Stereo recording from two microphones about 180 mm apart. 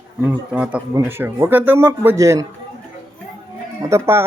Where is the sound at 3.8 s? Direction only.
15° right (ahead or behind).